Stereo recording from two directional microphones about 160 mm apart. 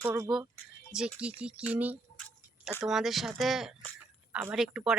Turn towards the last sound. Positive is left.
turn(degrees=-5)  # may be behind; listen again after turning